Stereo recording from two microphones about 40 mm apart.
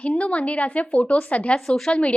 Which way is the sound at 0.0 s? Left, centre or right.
Left.